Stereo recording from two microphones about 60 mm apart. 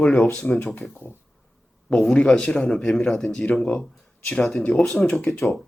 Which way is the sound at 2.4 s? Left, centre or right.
Centre.